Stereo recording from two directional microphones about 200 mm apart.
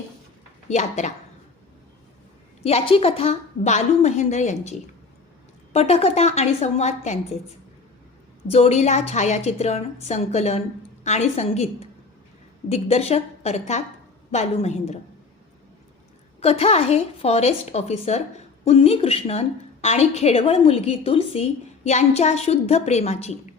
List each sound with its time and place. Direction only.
0.7 s a woman's voice: 35° left (ahead or behind)
2.6 s a woman's voice: 30° left (ahead or behind)
5.7 s a woman's voice: 30° left (ahead or behind)
8.4 s a woman's voice: 30° left (ahead or behind)
16.4 s a woman's voice: 30° left (ahead or behind)